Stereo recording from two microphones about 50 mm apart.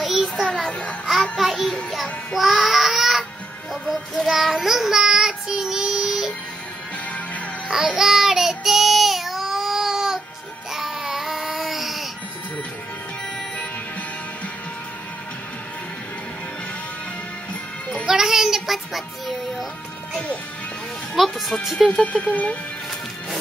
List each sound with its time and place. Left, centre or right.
0.0 s music: centre
0.5 s a child's voice: centre
1.3 s a child's voice: centre
2.3 s child singing: centre
3.0 s music: centre
3.8 s child singing: centre
7.7 s child singing: centre
8.0 s child singing: centre
18.0 s music: centre
21.1 s a child's voice: centre
21.7 s a child's voice: centre
22.0 s speech: left